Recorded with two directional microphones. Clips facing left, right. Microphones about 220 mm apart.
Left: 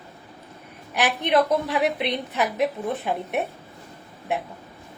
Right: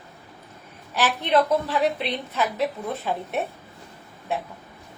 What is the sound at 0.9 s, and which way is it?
A woman's voice, 15° left (ahead or behind).